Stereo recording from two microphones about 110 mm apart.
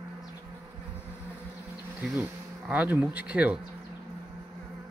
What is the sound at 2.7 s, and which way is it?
Speech, 15° right (ahead or behind).